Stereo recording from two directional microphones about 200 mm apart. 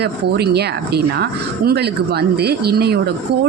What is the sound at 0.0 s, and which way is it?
A woman's voice, 55° right (ahead or behind).